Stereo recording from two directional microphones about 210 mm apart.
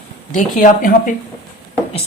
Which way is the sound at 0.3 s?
40° left (ahead or behind).